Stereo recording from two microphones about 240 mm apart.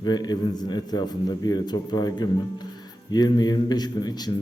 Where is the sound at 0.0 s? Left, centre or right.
Centre.